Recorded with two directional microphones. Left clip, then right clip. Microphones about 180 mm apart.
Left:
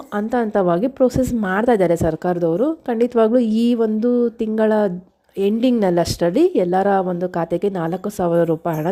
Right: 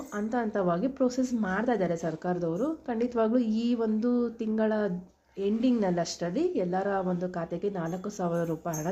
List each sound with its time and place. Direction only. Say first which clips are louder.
0.2 s a woman's voice: left 11 dB; 45° left (ahead or behind)